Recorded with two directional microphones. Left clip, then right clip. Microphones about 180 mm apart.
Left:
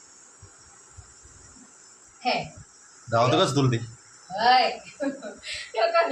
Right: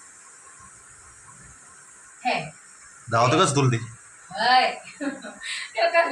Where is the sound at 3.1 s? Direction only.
15° right (ahead or behind).